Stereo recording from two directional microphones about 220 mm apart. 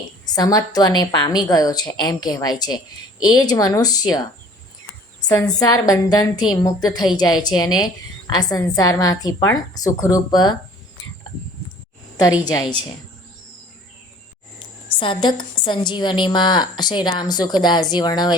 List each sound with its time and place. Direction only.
0.3 s a woman's voice: 15° left (ahead or behind)
5.5 s a woman's voice: 15° left (ahead or behind)
12.4 s a woman's voice: 15° left (ahead or behind)
14.9 s a woman's voice: 20° left (ahead or behind)